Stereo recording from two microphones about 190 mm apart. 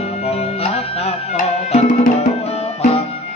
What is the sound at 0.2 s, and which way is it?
Music, 35° left (ahead or behind).